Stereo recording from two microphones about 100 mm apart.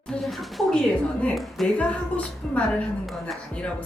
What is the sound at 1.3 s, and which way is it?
Speech, centre (ahead or behind).